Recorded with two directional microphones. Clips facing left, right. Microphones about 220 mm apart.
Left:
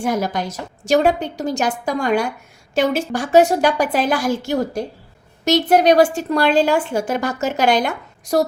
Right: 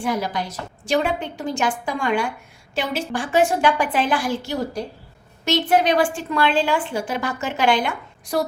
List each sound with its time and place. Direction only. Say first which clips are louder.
0.0 s a woman's voice: left 3 dB; 45° left (ahead or behind)